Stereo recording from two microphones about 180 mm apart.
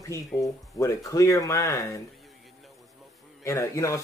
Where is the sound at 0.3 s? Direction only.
20° left (ahead or behind).